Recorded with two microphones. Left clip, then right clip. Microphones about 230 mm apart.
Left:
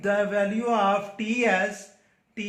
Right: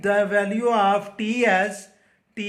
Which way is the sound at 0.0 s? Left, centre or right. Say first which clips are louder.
Right 4 dB; right.